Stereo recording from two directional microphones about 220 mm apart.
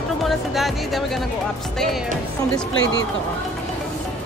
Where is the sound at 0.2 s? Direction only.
Centre (ahead or behind).